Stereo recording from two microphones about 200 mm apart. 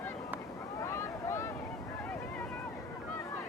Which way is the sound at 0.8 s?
15° left (ahead or behind).